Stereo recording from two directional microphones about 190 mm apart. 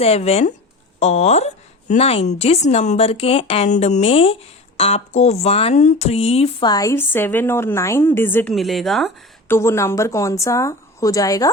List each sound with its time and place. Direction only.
0.0 s speech: 30° left (ahead or behind); by 8.5 s 10° left (ahead or behind)
8.5 s speech: centre (ahead or behind)
9.5 s a woman's voice: 15° left (ahead or behind)